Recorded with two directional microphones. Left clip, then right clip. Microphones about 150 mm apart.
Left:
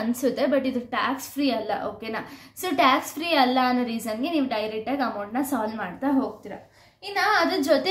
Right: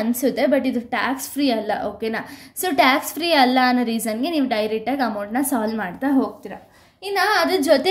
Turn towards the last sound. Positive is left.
turn(degrees=-35)  # may be behind; listen again after turning